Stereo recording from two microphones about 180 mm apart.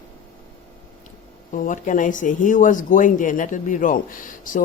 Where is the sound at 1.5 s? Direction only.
45° left (ahead or behind).